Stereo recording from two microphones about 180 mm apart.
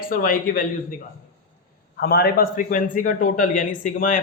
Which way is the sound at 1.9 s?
65° left (ahead or behind).